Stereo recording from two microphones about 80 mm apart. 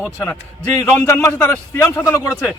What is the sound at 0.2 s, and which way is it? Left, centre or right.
Speech, left.